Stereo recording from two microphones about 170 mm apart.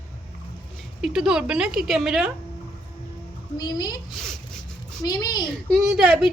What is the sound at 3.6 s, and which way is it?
Speech, 25° left (ahead or behind).